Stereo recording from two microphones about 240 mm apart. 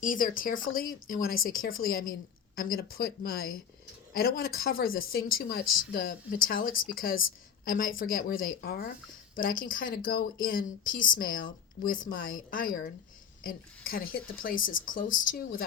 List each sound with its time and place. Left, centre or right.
0.0 s speech: left